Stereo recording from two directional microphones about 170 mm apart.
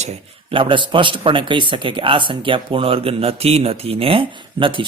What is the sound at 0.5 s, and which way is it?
A man's voice, 30° right (ahead or behind).